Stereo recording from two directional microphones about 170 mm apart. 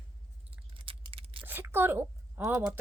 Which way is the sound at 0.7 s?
30° right (ahead or behind).